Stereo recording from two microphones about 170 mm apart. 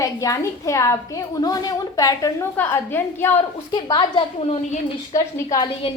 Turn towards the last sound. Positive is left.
turn(degrees=30)  # may be behind; listen again after turning